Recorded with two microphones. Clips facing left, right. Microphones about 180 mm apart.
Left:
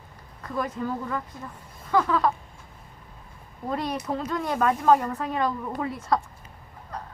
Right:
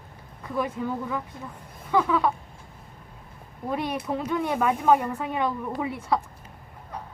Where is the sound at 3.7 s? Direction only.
5° right (ahead or behind).